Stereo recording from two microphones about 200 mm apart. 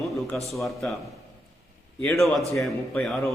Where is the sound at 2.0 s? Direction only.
Centre (ahead or behind).